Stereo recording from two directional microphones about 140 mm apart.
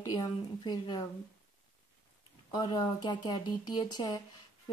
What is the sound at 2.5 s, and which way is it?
Speech, 30° left (ahead or behind).